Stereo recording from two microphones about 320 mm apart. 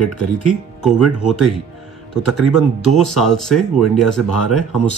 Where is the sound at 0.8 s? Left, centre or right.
Centre.